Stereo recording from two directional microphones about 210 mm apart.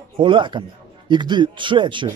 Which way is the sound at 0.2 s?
20° right (ahead or behind).